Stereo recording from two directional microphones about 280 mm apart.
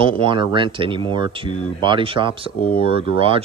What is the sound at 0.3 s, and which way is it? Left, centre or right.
Speech, centre.